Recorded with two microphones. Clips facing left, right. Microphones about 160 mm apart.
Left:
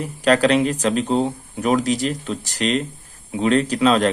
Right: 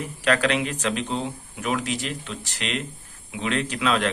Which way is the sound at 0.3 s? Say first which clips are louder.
Left 7 dB; 35° left (ahead or behind).